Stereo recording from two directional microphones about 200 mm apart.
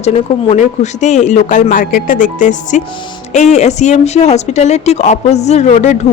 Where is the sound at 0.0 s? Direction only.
35° left (ahead or behind).